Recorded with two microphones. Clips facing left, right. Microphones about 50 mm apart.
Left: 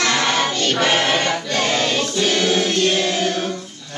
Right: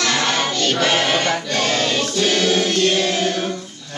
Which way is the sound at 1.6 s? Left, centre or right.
Centre.